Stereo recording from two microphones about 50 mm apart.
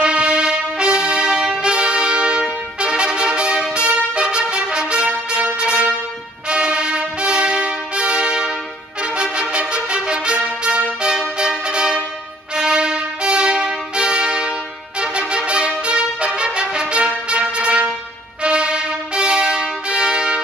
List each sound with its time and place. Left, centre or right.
0.0 s music: right
2.8 s trumpet: centre
3.7 s music: centre